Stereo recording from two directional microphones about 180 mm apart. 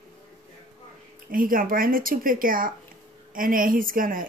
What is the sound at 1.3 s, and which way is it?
Speech, 50° right (ahead or behind).